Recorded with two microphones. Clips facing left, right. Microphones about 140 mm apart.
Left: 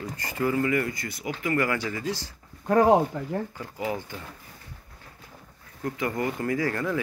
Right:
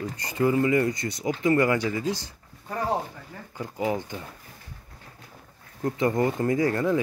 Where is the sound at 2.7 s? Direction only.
90° left.